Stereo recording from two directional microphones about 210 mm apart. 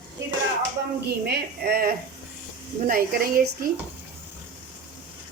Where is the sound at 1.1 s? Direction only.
50° right (ahead or behind).